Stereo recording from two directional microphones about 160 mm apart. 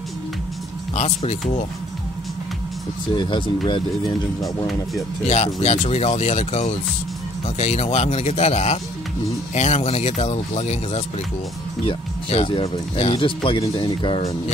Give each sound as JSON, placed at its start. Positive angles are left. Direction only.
{"t": 0.9, "sound": "speech", "side_deg": 45}
{"t": 3.2, "sound": "speech", "side_deg": 30}
{"t": 4.4, "sound": "speech", "side_deg": 0}
{"t": 5.3, "sound": "speech", "side_deg": 45}